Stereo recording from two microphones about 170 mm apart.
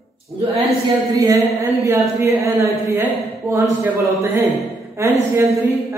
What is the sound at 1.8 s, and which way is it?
A woman's voice, 15° right (ahead or behind).